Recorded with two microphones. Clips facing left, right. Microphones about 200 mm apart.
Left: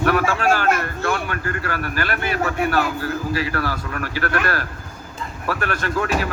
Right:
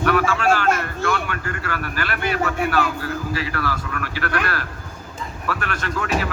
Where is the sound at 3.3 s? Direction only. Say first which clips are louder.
Left 2 dB; 40° left (ahead or behind).